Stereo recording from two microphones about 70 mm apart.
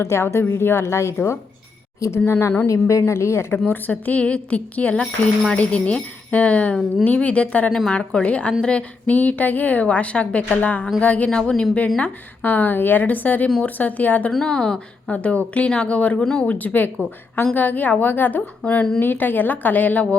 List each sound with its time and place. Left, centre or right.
0.0 s a woman's voice: left
2.6 s speech: left
3.7 s a woman's voice: left
14.3 s speech: centre
15.1 s a woman's voice: centre